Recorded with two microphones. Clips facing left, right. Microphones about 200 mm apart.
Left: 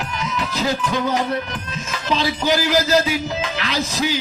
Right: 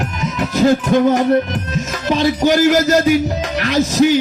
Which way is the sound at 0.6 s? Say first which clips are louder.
Right 10 dB; 50° right (ahead or behind).